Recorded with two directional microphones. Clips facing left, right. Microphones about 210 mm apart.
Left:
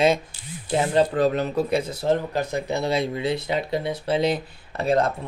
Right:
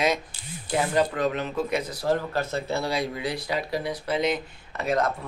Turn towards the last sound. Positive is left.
turn(degrees=30)  # may be behind; listen again after turning